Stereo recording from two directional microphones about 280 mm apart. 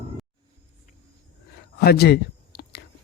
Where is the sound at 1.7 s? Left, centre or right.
Left.